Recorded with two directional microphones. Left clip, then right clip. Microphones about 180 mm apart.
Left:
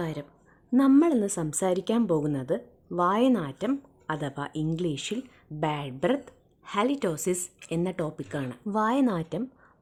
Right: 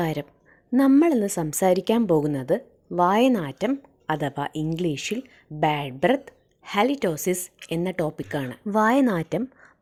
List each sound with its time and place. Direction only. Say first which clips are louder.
0.0 s a woman's voice: right 7 dB; 25° right (ahead or behind)